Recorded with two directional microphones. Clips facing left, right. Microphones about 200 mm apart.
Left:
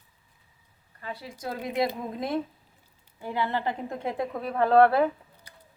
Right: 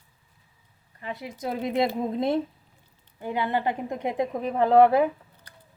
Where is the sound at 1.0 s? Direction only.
20° right (ahead or behind).